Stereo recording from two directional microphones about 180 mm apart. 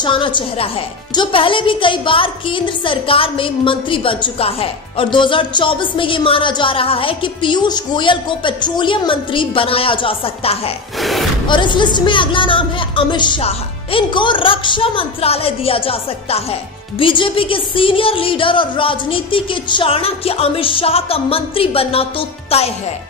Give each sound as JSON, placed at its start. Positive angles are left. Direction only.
{"t": 0.0, "sound": "speech", "side_deg": 25}
{"t": 11.0, "sound": "speech", "side_deg": 0}
{"t": 11.4, "sound": "speech", "side_deg": 25}